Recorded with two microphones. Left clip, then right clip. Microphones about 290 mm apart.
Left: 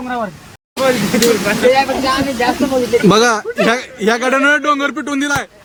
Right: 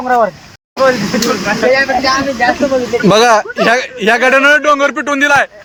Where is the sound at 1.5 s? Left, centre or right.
Centre.